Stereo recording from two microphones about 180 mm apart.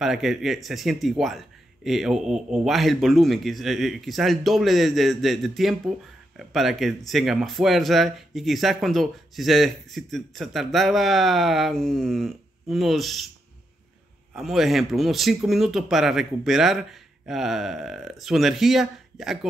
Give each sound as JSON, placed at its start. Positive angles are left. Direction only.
{"t": 0.0, "sound": "a man's voice", "side_deg": 0}
{"t": 14.3, "sound": "a man's voice", "side_deg": 0}